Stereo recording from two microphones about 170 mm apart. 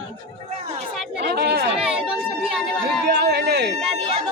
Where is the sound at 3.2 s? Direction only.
70° right (ahead or behind).